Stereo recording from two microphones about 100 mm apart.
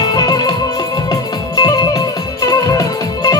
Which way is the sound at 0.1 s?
40° left (ahead or behind).